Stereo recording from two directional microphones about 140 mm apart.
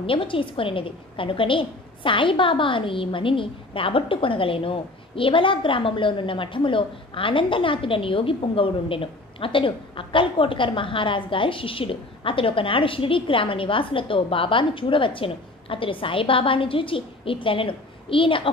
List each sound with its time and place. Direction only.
0.0 s a woman's voice: 40° left (ahead or behind)